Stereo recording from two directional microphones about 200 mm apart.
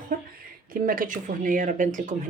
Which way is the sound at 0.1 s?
45° right (ahead or behind).